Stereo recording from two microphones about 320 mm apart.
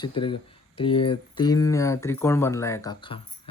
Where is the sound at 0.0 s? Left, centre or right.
Centre.